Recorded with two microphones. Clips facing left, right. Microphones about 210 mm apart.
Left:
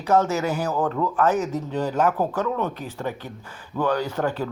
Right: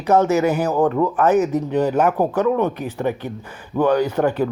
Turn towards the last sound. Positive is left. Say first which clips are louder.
# right 7 dB
turn(degrees=-15)  # may be behind; listen again after turning